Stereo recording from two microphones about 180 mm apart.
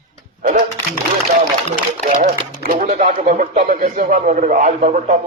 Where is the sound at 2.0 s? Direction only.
40° right (ahead or behind).